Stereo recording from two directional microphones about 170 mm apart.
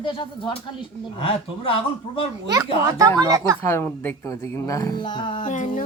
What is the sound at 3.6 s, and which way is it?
Speech, 15° left (ahead or behind).